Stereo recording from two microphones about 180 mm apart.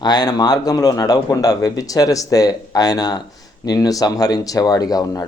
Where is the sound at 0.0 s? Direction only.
20° left (ahead or behind).